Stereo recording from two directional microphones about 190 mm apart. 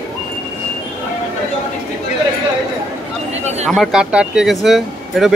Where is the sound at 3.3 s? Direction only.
35° right (ahead or behind).